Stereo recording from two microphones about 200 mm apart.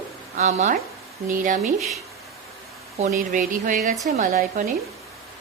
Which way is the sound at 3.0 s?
40° right (ahead or behind).